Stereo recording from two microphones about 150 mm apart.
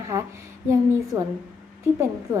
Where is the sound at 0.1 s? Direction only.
15° right (ahead or behind).